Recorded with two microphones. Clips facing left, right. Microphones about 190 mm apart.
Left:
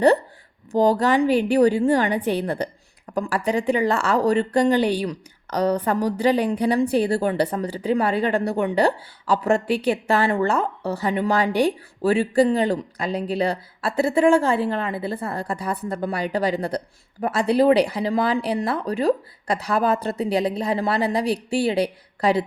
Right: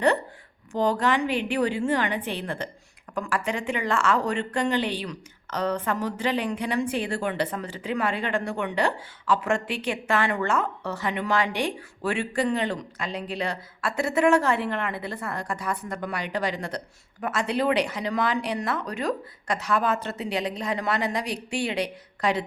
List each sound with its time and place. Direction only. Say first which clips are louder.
0.7 s speech: left 5 dB; 35° left (ahead or behind)